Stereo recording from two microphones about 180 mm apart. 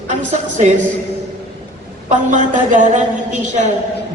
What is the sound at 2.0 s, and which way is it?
A woman's voice, 45° right (ahead or behind).